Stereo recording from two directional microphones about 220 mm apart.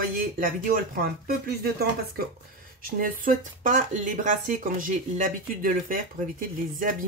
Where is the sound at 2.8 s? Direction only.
40° right (ahead or behind).